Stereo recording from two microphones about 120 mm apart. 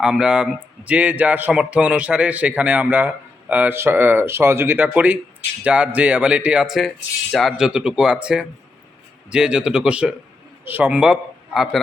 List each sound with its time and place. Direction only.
0.0 s a man's voice: 5° right (ahead or behind)